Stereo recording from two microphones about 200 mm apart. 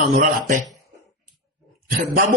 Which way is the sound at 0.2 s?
40° right (ahead or behind).